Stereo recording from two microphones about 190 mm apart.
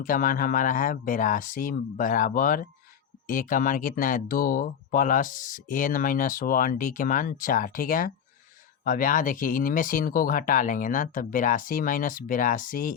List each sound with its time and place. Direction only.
0.0 s speech: 45° left (ahead or behind)